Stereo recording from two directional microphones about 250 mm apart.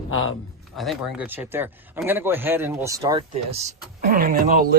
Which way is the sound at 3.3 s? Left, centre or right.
Right.